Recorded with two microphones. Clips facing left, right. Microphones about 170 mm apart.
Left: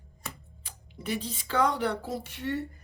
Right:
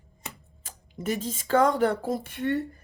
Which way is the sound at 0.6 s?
45° right (ahead or behind).